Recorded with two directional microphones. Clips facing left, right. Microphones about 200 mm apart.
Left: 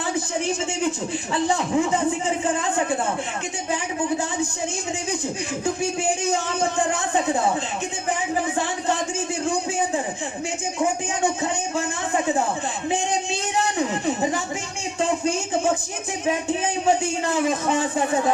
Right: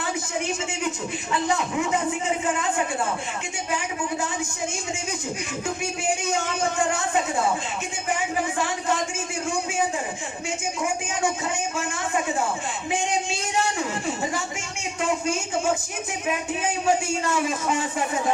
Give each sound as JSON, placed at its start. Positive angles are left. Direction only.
{"t": 1.3, "sound": "a man's voice", "side_deg": 30}